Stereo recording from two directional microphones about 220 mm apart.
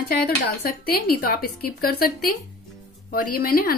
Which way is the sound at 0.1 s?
45° left (ahead or behind).